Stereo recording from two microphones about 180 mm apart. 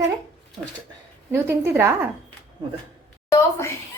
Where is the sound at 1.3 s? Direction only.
15° right (ahead or behind).